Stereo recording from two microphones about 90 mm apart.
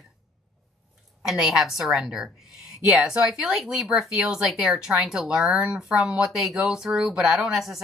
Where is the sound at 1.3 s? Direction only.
5° right (ahead or behind).